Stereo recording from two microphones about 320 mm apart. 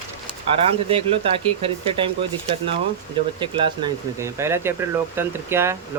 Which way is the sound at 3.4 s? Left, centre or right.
Centre.